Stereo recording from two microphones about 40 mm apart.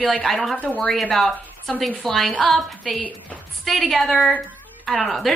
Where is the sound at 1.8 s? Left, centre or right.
Centre.